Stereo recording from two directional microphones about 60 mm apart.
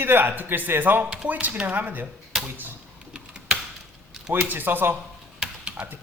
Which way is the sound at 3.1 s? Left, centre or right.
Centre.